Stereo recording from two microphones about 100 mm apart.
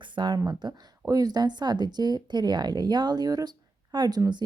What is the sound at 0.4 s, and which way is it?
Speech, 40° right (ahead or behind).